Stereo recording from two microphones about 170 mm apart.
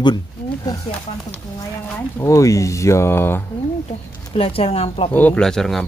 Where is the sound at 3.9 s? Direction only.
35° left (ahead or behind).